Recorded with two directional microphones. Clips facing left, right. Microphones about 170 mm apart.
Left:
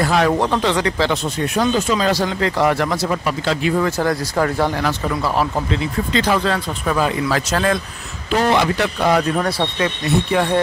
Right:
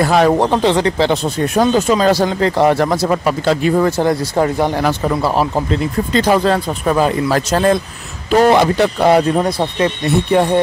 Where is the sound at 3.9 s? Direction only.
25° right (ahead or behind).